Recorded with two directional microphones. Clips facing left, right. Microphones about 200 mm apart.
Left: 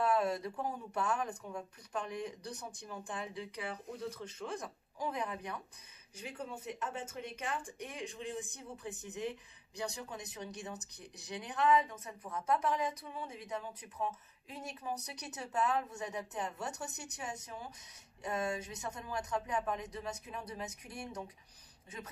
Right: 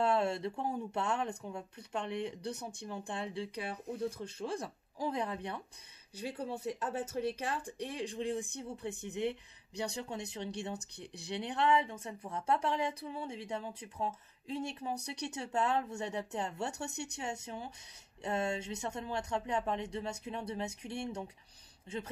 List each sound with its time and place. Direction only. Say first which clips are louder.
0.0 s speech: right 1 dB; 30° right (ahead or behind)